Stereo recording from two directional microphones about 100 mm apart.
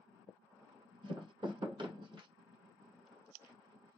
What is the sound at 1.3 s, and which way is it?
Music, 50° right (ahead or behind).